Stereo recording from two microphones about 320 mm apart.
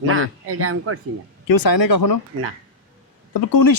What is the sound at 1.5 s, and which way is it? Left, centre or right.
Speech, left.